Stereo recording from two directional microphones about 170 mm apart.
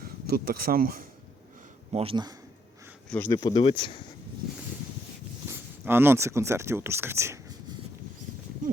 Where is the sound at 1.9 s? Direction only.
35° right (ahead or behind).